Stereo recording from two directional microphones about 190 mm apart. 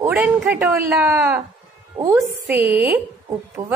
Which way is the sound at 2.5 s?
10° right (ahead or behind).